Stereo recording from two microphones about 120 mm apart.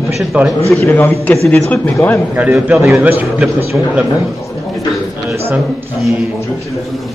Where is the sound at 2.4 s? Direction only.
10° right (ahead or behind).